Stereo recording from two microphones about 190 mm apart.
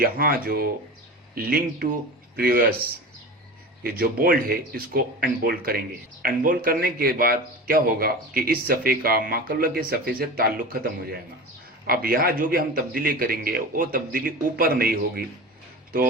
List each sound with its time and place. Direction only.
0.0 s a man's voice: 50° right (ahead or behind)
3.8 s a man's voice: 50° right (ahead or behind)